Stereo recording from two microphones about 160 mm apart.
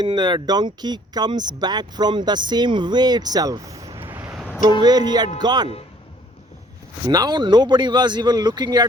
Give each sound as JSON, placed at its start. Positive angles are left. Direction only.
{"t": 0.0, "sound": "speech", "side_deg": -30}
{"t": 4.8, "sound": "speech", "side_deg": -25}
{"t": 7.1, "sound": "speech", "side_deg": -25}